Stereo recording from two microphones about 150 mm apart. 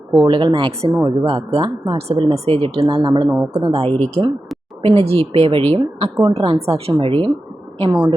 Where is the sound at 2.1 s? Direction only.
40° right (ahead or behind).